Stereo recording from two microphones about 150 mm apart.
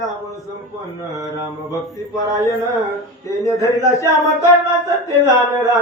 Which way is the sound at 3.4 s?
20° left (ahead or behind).